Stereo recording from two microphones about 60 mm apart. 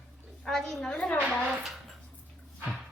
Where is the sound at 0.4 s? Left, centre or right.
Centre.